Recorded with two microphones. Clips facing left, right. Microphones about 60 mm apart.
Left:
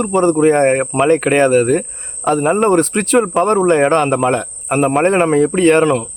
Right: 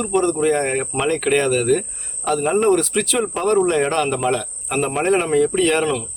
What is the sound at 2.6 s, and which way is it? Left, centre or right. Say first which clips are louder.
A man's voice: left 4 dB; left.